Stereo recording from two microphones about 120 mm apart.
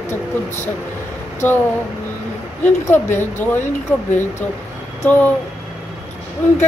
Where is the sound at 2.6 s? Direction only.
20° left (ahead or behind).